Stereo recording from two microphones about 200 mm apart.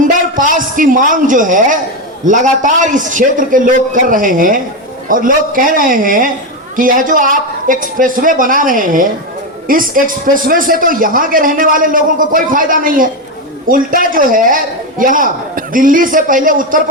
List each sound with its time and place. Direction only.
0.0 s a man's voice: 40° right (ahead or behind)